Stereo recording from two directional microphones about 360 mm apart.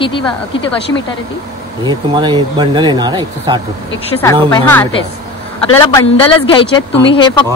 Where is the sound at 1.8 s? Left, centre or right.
Centre.